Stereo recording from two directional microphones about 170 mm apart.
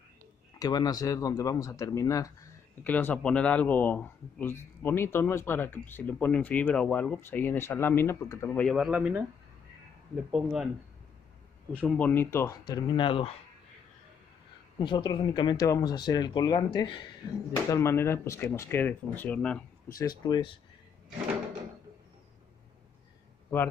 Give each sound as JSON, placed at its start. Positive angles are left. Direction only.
{"t": 0.6, "sound": "speech", "side_deg": 25}
{"t": 8.6, "sound": "speech", "side_deg": 0}
{"t": 11.7, "sound": "speech", "side_deg": 10}
{"t": 12.6, "sound": "speech", "side_deg": 25}
{"t": 14.8, "sound": "speech", "side_deg": 30}
{"t": 20.0, "sound": "speech", "side_deg": 25}
{"t": 23.5, "sound": "speech", "side_deg": 10}